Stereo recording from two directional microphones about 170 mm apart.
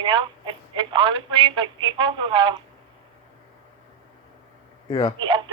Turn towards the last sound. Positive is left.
turn(degrees=-30)  # may be behind; listen again after turning